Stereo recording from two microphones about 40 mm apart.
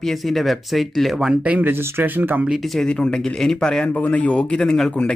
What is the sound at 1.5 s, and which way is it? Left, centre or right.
Speech, right.